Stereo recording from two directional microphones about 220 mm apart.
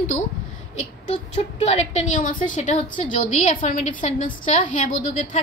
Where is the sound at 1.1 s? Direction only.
30° left (ahead or behind).